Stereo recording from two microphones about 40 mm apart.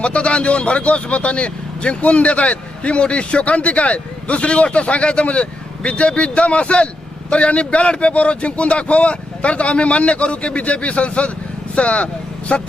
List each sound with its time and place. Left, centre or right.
0.0 s speech: left